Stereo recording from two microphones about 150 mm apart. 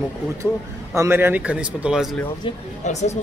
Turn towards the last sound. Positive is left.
turn(degrees=50)  # may be behind; listen again after turning